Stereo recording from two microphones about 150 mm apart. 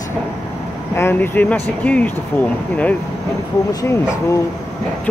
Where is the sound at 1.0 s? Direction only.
15° left (ahead or behind).